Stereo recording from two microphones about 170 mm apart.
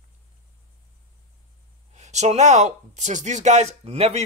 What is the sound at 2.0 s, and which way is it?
A man's voice, 40° right (ahead or behind).